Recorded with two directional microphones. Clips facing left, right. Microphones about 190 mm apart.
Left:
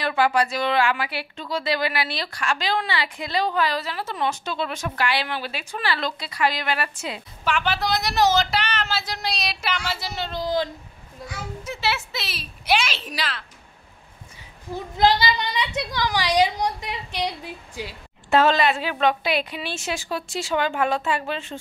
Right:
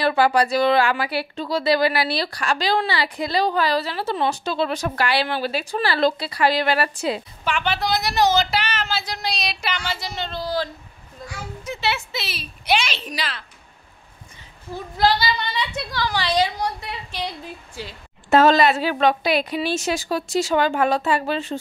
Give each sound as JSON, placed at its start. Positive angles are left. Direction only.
{"t": 0.0, "sound": "speech", "side_deg": -35}
{"t": 7.4, "sound": "speech", "side_deg": 0}
{"t": 10.3, "sound": "speech", "side_deg": 20}
{"t": 11.6, "sound": "speech", "side_deg": 5}
{"t": 14.7, "sound": "a woman's voice", "side_deg": 20}
{"t": 18.3, "sound": "speech", "side_deg": -40}